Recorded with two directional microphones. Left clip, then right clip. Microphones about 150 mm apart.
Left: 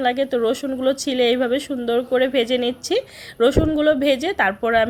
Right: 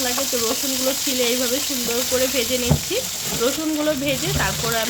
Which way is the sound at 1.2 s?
30° left (ahead or behind).